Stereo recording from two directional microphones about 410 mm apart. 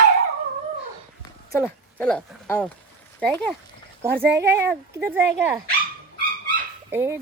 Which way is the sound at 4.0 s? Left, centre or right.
Centre.